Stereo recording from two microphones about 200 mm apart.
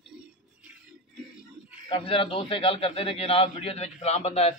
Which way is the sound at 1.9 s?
25° left (ahead or behind).